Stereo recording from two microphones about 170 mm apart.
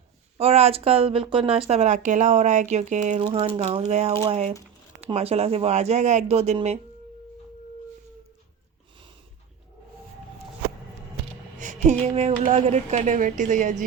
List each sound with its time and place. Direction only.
0.3 s speech: 35° right (ahead or behind)
11.6 s a woman's voice: 45° right (ahead or behind)